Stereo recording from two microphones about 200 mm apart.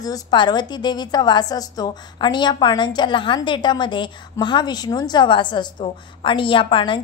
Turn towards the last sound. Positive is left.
turn(degrees=25)  # may be behind; listen again after turning